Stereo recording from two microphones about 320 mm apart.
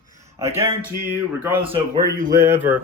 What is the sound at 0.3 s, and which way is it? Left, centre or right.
Speech, centre.